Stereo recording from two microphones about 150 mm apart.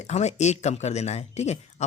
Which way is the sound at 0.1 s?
50° left (ahead or behind).